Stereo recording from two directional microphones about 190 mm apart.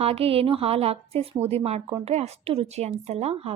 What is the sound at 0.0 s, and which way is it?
A woman's voice, 30° right (ahead or behind).